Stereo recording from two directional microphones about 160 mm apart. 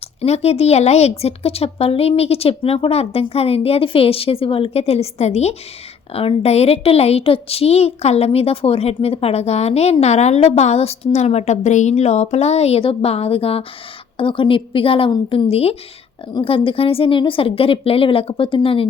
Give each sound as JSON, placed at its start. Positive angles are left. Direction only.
{"t": 0.2, "sound": "a woman's voice", "side_deg": 40}